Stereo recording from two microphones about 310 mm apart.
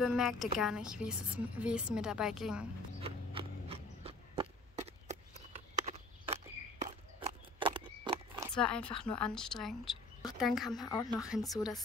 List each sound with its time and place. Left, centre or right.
0.0 s a woman's voice: centre
3.0 s a sound: centre
5.3 s walk: right
8.5 s a woman's voice: centre